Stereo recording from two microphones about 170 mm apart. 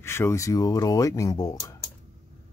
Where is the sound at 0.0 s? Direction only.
15° left (ahead or behind).